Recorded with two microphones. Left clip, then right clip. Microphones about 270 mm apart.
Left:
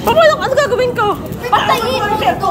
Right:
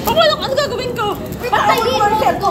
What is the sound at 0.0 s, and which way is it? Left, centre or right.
A woman's voice, centre.